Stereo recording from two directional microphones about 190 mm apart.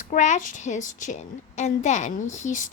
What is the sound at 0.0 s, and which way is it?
A woman's voice, 40° left (ahead or behind).